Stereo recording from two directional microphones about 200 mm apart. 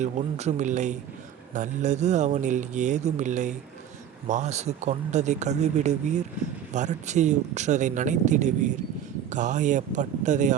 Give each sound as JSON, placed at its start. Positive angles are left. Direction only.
{"t": 0.0, "sound": "speech", "side_deg": -35}